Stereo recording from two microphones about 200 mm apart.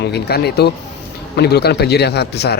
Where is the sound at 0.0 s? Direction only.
55° left (ahead or behind).